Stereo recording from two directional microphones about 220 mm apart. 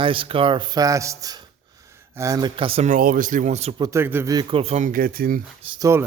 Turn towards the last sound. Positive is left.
turn(degrees=-15)  # may be behind; listen again after turning